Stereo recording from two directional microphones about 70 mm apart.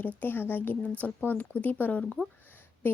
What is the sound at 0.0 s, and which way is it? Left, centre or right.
Speech, left.